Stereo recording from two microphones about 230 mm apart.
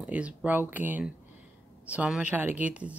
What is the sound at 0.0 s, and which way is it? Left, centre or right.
Speech, centre.